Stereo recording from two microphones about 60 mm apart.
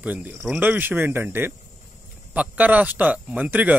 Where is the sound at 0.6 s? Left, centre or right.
Right.